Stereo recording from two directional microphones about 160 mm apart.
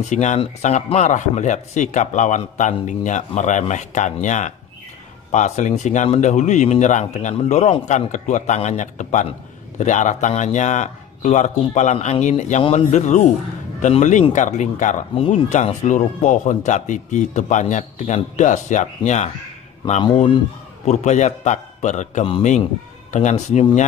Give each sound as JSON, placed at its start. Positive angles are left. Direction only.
{"t": 0.1, "sound": "speech", "side_deg": 50}
{"t": 15.1, "sound": "speech", "side_deg": 35}
{"t": 20.8, "sound": "speech", "side_deg": 45}